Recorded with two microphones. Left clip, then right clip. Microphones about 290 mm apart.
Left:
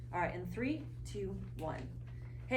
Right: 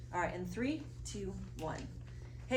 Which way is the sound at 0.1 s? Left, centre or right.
Right.